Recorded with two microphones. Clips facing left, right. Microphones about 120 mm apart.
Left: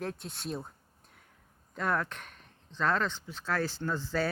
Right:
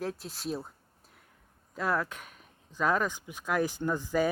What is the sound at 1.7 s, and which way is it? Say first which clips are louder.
Speech: right 1 dB; 5° right (ahead or behind).